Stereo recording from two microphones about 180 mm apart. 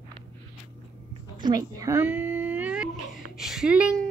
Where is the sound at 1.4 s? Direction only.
20° right (ahead or behind).